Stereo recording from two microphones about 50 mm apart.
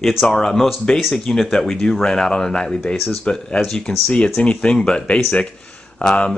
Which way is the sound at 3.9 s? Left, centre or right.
Centre.